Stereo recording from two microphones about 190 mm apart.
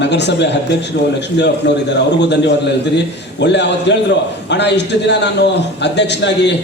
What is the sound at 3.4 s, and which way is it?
A man's voice, 65° left (ahead or behind).